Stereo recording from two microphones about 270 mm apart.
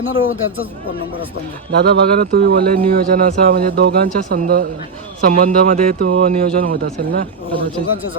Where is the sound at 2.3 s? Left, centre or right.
Right.